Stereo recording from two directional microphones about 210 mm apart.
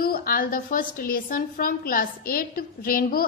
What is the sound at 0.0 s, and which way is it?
A woman's voice, 45° left (ahead or behind).